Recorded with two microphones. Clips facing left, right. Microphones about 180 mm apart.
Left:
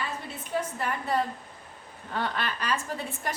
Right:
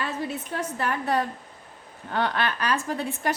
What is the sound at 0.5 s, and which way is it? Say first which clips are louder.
A woman's voice: even; 75° right (ahead or behind).